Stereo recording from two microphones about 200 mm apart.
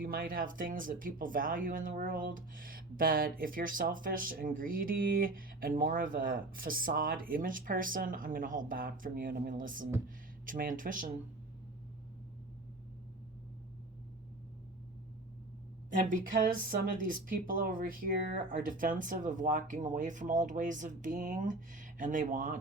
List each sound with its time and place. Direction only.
0.0 s speech: 45° right (ahead or behind)
15.9 s speech: 40° right (ahead or behind)